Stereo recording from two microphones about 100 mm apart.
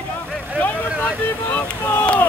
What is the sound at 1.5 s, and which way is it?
Boat, 15° left (ahead or behind).